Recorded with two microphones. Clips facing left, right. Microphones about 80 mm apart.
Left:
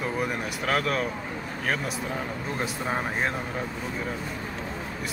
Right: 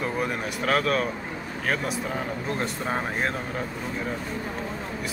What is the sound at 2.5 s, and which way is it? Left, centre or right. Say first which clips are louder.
Speech: even; centre.